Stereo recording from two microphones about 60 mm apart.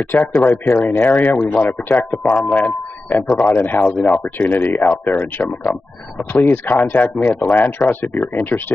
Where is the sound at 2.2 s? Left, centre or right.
Centre.